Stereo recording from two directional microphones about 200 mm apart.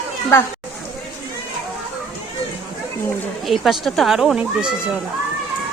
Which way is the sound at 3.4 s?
Centre (ahead or behind).